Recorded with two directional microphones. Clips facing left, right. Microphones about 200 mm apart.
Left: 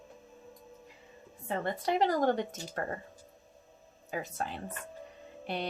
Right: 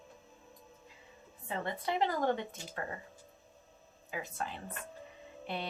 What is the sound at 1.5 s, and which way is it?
A woman's voice, 45° left (ahead or behind).